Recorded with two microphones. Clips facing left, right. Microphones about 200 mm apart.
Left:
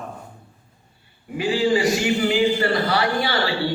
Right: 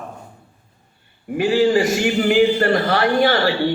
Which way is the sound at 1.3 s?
50° right (ahead or behind).